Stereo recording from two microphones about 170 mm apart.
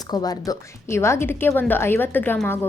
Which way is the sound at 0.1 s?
25° left (ahead or behind).